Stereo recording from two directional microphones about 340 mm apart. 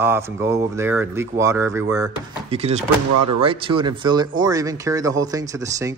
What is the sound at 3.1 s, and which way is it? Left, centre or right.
Speech, right.